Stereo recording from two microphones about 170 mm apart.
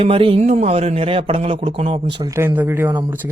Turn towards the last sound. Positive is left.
turn(degrees=-10)  # may be behind; listen again after turning